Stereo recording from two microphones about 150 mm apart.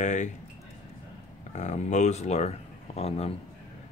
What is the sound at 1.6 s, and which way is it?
Speech, 50° left (ahead or behind).